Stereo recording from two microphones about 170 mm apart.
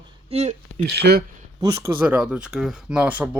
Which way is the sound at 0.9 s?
70° right (ahead or behind).